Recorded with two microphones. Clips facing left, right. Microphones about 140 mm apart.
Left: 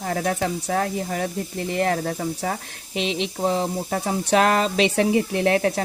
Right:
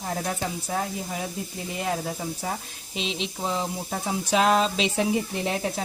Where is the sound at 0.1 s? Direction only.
70° left (ahead or behind).